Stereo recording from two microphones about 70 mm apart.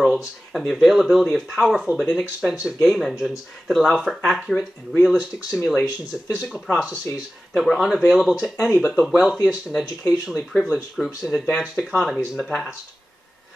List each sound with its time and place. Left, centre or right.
0.5 s speech: centre
8.7 s speech: centre
9.5 s speech: centre
10.5 s speech: centre